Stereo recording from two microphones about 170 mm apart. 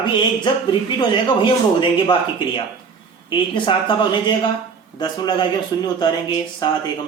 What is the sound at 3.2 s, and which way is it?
Speech, 30° left (ahead or behind).